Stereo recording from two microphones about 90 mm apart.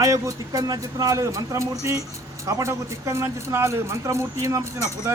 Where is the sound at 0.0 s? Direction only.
40° right (ahead or behind).